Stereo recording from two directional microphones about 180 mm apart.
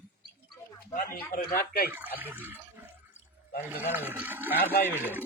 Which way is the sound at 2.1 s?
10° right (ahead or behind).